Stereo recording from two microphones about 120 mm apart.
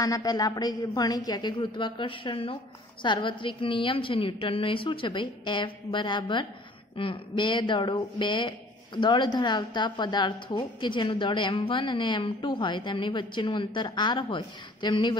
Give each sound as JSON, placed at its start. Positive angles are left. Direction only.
{"t": 0.0, "sound": "a woman's voice", "side_deg": 30}